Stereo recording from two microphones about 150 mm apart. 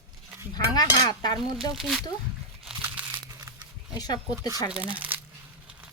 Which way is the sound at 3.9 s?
25° left (ahead or behind).